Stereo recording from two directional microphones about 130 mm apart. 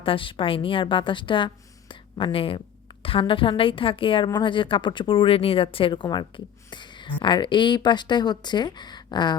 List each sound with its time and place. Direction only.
0.0 s a woman's voice: 40° left (ahead or behind)